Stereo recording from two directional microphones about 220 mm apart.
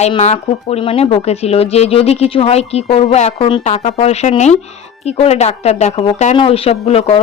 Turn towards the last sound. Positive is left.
turn(degrees=25)  # may be behind; listen again after turning